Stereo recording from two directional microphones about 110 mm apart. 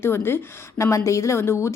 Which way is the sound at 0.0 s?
20° left (ahead or behind).